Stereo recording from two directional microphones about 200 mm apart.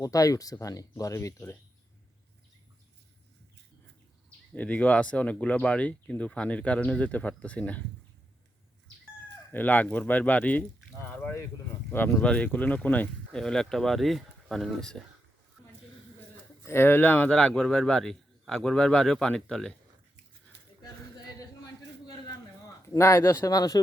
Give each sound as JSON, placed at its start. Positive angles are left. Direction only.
{"t": 0.0, "sound": "speech", "side_deg": 15}
{"t": 4.5, "sound": "speech", "side_deg": 5}
{"t": 9.5, "sound": "speech", "side_deg": 10}
{"t": 16.6, "sound": "speech", "side_deg": 10}
{"t": 22.9, "sound": "speech", "side_deg": 15}